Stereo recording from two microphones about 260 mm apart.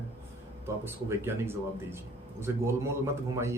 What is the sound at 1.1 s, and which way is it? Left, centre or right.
Speech, centre.